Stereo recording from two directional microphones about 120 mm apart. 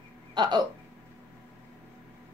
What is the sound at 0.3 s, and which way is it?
Speech, 40° right (ahead or behind).